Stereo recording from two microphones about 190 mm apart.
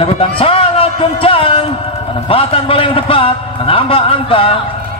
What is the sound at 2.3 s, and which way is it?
A man's voice, 30° left (ahead or behind).